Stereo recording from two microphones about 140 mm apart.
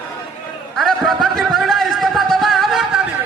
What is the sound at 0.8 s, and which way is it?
Music, centre (ahead or behind).